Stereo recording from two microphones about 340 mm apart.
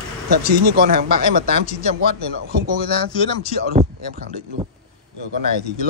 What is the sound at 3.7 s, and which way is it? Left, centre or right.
Speech, right.